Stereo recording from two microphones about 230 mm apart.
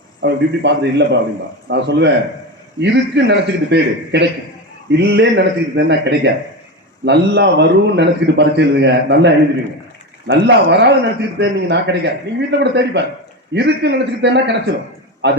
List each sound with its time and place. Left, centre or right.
0.2 s a man's voice: right